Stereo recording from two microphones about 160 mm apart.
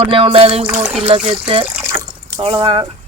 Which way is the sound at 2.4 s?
35° right (ahead or behind).